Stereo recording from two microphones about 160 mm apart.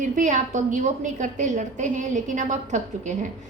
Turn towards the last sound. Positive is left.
turn(degrees=-50)  # may be behind; listen again after turning